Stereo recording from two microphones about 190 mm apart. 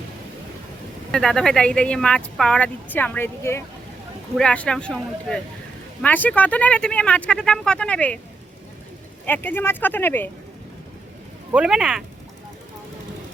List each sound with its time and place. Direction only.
1.1 s speech: centre (ahead or behind)
9.2 s speech: 10° left (ahead or behind)
11.5 s speech: 5° right (ahead or behind)